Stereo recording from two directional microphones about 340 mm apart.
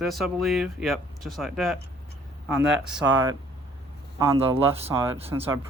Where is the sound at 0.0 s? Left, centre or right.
Centre.